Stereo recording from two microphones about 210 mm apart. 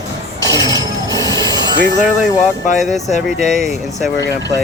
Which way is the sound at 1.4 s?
20° right (ahead or behind).